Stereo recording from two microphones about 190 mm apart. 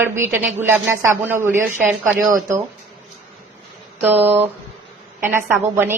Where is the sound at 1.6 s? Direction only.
Centre (ahead or behind).